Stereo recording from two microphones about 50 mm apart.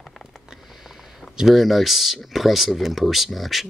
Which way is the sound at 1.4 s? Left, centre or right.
Centre.